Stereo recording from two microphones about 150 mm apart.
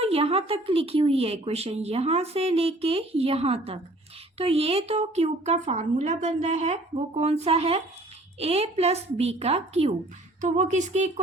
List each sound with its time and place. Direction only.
0.0 s speech: 40° right (ahead or behind)